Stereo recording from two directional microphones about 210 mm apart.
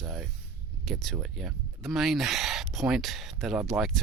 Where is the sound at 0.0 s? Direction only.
Centre (ahead or behind).